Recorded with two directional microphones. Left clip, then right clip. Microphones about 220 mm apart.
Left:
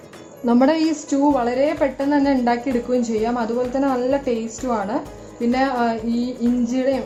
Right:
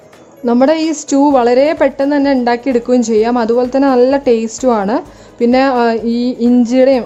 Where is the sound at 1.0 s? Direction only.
40° right (ahead or behind).